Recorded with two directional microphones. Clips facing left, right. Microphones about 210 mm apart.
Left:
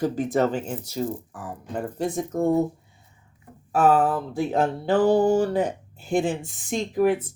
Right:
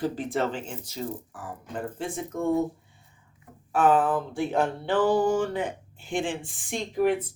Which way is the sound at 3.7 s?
40° left (ahead or behind).